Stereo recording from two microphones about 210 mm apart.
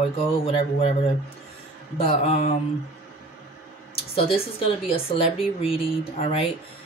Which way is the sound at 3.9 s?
25° left (ahead or behind).